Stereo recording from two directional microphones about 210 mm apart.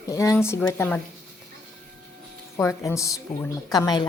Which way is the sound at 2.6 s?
15° left (ahead or behind).